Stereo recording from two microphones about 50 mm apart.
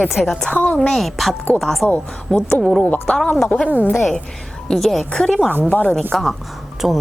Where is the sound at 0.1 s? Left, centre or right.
Centre.